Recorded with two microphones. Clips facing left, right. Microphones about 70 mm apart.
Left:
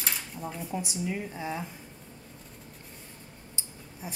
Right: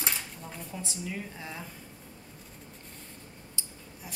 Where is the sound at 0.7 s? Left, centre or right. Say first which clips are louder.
Left 5 dB; centre.